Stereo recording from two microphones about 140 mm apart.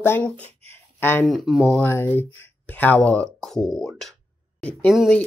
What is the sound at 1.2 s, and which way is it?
Speech, centre (ahead or behind).